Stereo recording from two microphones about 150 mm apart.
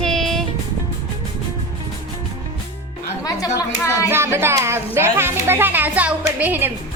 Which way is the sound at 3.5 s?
20° left (ahead or behind).